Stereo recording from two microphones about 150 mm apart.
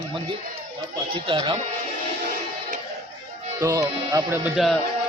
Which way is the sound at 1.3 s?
35° right (ahead or behind).